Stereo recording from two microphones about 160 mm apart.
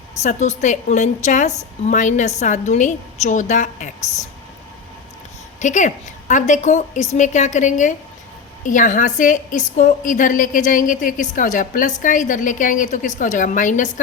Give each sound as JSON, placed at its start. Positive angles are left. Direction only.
{"t": 0.2, "sound": "a woman's voice", "side_deg": 45}
{"t": 5.5, "sound": "a woman's voice", "side_deg": 50}